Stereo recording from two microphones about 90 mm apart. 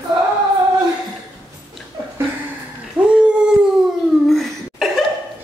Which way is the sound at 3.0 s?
10° right (ahead or behind).